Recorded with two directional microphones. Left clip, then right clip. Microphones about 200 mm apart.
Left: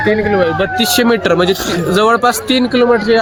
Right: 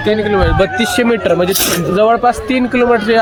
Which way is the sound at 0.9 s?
20° left (ahead or behind).